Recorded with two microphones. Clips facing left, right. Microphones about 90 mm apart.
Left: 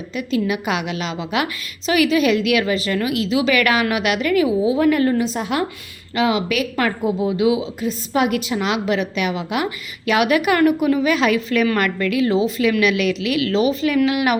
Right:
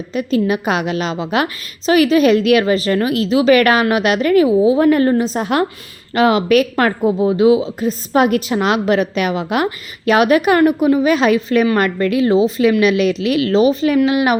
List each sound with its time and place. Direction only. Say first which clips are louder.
0.1 s a woman's voice: right 5 dB; 40° right (ahead or behind)
7.2 s a woman's voice: right 7 dB; 40° right (ahead or behind)